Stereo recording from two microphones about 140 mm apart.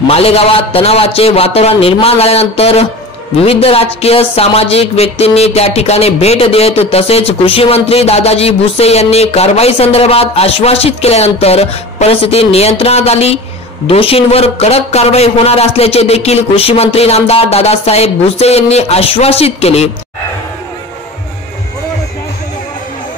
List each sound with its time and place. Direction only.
0.1 s speech: 45° left (ahead or behind)